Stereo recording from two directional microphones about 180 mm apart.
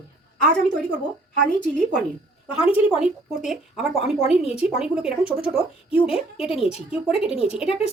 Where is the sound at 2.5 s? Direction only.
5° right (ahead or behind).